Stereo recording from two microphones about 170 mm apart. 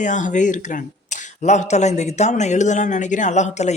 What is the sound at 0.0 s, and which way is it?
Speech, 45° left (ahead or behind).